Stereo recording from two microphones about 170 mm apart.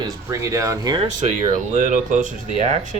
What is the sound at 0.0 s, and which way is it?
Speech, 20° right (ahead or behind).